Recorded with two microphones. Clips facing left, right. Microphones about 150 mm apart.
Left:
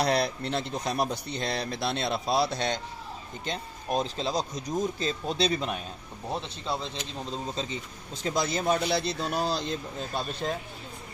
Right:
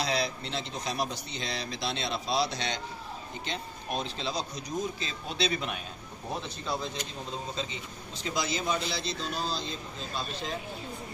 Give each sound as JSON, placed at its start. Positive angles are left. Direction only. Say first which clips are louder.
{"t": 0.0, "sound": "speech", "louder": "left 5 dB", "side_deg": 55}
{"t": 3.4, "sound": "speech", "louder": "left 5 dB", "side_deg": 40}
{"t": 7.5, "sound": "a man's voice", "louder": "left 3 dB", "side_deg": 40}